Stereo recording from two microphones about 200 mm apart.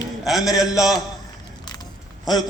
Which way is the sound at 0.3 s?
Centre (ahead or behind).